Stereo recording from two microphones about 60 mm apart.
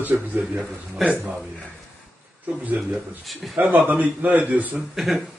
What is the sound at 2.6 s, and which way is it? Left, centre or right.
A man's voice, right.